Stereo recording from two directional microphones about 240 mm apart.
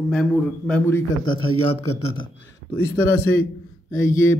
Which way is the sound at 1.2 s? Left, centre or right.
Left.